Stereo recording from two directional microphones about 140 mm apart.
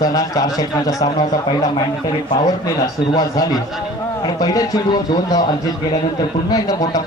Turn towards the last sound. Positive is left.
turn(degrees=25)  # may be behind; listen again after turning